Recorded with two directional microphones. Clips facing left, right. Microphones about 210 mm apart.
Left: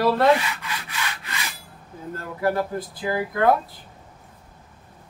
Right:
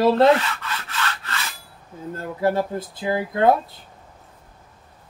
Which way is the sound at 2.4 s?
25° right (ahead or behind).